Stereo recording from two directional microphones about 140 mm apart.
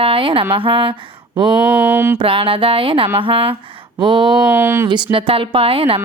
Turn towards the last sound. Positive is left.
turn(degrees=-40)  # may be behind; listen again after turning